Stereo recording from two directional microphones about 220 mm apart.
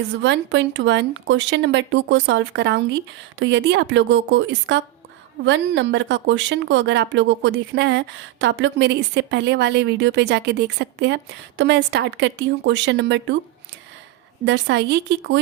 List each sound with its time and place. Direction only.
0.2 s speech: 55° right (ahead or behind)
14.4 s speech: 55° right (ahead or behind)